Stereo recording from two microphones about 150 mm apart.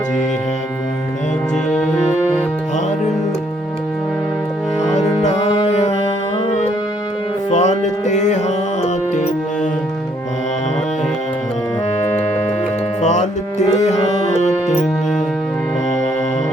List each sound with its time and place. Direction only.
4.9 s music: 50° left (ahead or behind)
7.5 s music: 50° left (ahead or behind)
13.0 s music: 50° left (ahead or behind)